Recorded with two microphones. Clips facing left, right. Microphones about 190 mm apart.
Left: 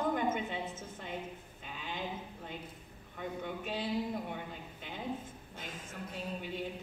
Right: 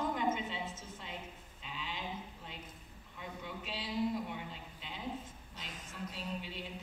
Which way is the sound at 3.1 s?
55° left (ahead or behind).